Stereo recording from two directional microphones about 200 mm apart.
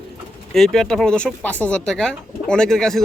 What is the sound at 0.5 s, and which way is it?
Speech, centre (ahead or behind).